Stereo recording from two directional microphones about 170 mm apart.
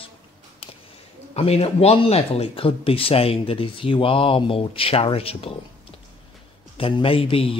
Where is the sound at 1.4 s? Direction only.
35° left (ahead or behind).